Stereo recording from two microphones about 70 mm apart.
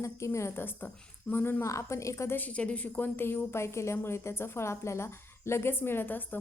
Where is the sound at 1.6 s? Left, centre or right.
Left.